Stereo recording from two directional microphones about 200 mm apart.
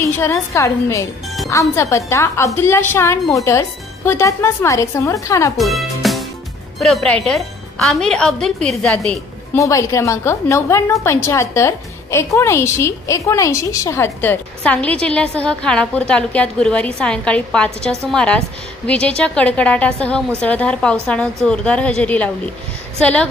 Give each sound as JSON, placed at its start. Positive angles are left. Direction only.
{"t": 0.0, "sound": "a woman's voice", "side_deg": 15}
{"t": 5.6, "sound": "music", "side_deg": 0}
{"t": 6.8, "sound": "a woman's voice", "side_deg": 0}